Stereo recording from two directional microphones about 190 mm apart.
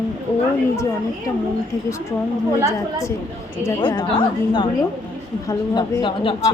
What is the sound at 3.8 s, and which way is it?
A child's voice, 25° left (ahead or behind).